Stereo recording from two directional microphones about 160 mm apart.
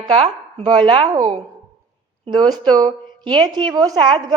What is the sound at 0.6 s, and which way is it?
A woman's voice, 30° right (ahead or behind).